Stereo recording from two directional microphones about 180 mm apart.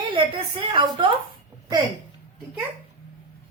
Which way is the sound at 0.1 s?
30° right (ahead or behind).